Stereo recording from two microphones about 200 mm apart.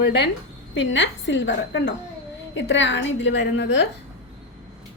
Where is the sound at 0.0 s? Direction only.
60° left (ahead or behind).